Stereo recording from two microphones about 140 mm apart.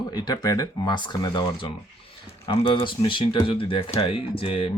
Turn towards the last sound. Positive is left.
turn(degrees=45)  # may be behind; listen again after turning